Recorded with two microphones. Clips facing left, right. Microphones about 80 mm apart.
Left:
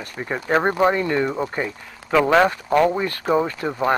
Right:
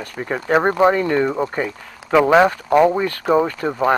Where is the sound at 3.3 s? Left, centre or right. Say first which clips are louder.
Right 3 dB; right.